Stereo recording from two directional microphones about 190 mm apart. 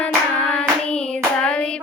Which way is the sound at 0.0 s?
5° left (ahead or behind).